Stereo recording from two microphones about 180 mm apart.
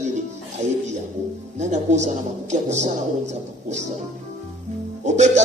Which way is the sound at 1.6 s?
40° right (ahead or behind).